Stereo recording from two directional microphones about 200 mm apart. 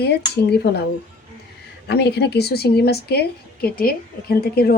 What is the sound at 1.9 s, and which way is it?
A woman's voice, 55° left (ahead or behind).